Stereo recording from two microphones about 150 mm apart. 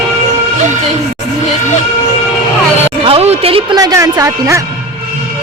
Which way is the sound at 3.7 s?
25° right (ahead or behind).